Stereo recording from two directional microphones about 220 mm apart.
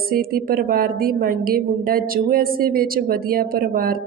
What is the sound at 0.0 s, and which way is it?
A woman's voice, 40° right (ahead or behind).